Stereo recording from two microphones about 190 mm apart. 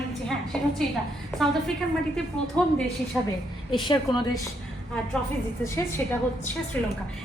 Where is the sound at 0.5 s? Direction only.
5° left (ahead or behind).